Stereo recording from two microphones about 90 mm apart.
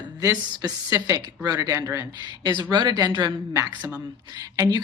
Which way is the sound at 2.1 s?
50° right (ahead or behind).